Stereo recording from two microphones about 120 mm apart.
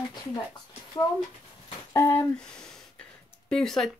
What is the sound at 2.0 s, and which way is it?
Speech, 20° left (ahead or behind).